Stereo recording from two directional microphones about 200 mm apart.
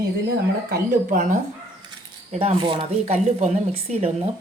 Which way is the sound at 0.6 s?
45° right (ahead or behind).